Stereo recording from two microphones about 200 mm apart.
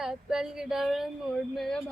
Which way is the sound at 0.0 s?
5° right (ahead or behind).